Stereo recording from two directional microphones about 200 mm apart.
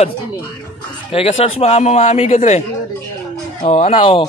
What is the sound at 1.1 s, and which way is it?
Speech, 30° left (ahead or behind).